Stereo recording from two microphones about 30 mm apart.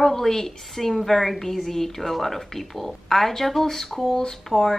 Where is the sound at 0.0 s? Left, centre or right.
Centre.